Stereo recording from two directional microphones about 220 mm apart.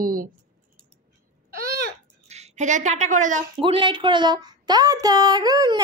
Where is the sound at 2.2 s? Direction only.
30° right (ahead or behind).